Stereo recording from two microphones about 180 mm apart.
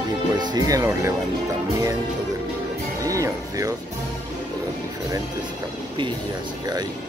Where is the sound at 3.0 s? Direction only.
20° right (ahead or behind).